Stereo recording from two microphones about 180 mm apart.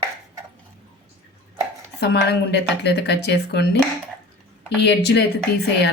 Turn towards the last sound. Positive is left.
turn(degrees=70)  # may be behind; listen again after turning